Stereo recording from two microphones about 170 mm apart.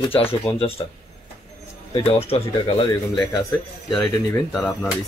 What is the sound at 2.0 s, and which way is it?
Speech, 35° left (ahead or behind).